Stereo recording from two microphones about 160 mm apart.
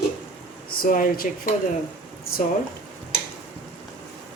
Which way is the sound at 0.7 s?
65° left (ahead or behind).